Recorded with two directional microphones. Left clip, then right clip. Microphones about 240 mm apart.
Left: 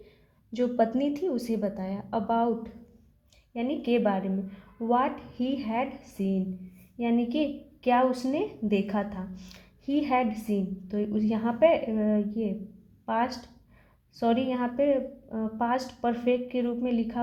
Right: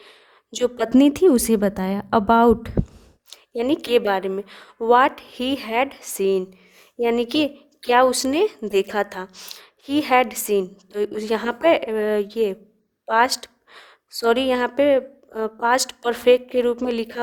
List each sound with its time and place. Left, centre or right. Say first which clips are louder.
0.5 s a woman's voice: right 7 dB; right